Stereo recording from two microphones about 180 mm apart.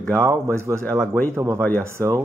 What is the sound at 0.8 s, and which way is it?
Speech, 5° left (ahead or behind).